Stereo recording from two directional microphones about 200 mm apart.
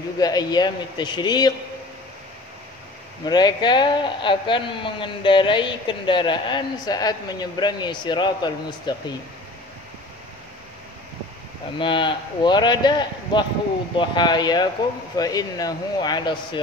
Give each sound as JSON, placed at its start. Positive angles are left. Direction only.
{"t": 0.2, "sound": "a man's voice", "side_deg": 20}
{"t": 3.3, "sound": "a man's voice", "side_deg": 20}
{"t": 11.8, "sound": "a man's voice", "side_deg": 25}